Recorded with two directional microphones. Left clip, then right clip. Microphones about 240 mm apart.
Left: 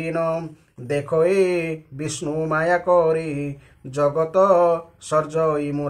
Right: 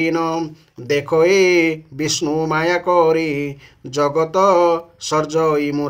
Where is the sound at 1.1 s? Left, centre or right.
Right.